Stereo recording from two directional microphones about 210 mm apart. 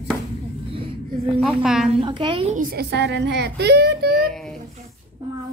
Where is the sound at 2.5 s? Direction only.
45° right (ahead or behind).